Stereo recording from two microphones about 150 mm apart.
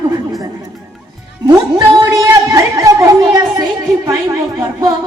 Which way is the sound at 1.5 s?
25° right (ahead or behind).